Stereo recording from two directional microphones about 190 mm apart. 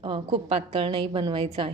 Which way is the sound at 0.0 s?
25° right (ahead or behind).